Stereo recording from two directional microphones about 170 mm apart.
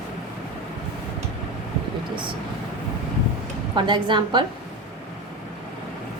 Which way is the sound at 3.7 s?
25° right (ahead or behind).